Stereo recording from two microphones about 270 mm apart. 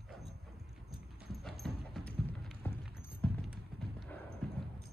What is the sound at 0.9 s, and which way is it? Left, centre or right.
Clip-clop, centre.